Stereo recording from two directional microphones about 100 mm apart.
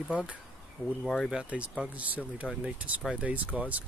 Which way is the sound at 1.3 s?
10° right (ahead or behind).